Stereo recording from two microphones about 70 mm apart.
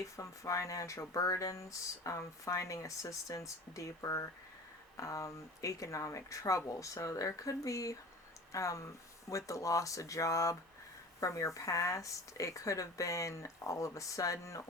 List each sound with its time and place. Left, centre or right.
0.0 s speech: left